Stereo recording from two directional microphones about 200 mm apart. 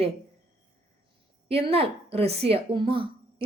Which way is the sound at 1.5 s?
30° right (ahead or behind).